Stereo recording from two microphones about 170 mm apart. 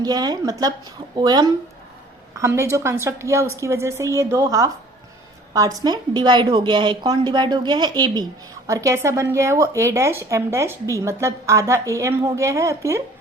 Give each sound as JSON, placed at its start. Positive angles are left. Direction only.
{"t": 0.0, "sound": "a woman's voice", "side_deg": -25}